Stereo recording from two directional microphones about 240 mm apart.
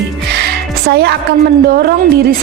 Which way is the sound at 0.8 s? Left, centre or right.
Right.